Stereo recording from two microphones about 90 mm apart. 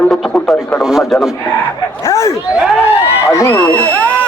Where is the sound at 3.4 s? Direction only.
20° left (ahead or behind).